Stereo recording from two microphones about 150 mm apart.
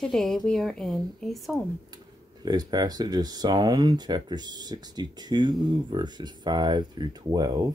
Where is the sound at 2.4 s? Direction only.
25° right (ahead or behind).